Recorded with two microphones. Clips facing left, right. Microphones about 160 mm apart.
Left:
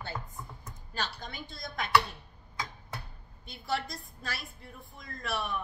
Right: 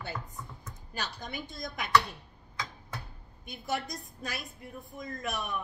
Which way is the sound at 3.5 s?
20° right (ahead or behind).